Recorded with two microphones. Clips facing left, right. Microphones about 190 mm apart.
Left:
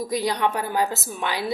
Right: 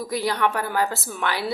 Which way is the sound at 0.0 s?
20° left (ahead or behind).